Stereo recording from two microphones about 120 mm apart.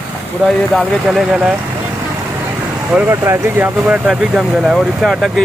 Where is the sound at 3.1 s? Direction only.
20° right (ahead or behind).